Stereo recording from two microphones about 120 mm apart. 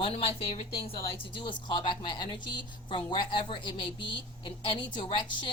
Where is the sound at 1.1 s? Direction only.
45° left (ahead or behind).